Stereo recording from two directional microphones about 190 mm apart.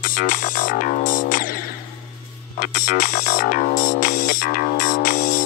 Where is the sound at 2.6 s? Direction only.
45° left (ahead or behind).